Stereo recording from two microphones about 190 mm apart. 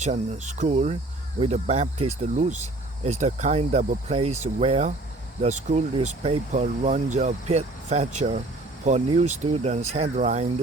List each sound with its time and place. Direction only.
0.0 s speech: 35° right (ahead or behind)